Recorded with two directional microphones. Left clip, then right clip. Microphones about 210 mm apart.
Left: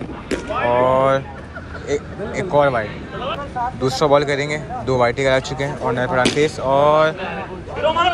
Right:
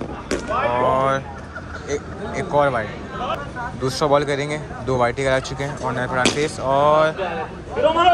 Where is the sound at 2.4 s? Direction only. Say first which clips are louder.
Left 2 dB; 10° right (ahead or behind).